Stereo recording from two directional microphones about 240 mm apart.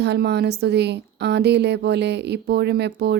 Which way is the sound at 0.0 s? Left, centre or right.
Right.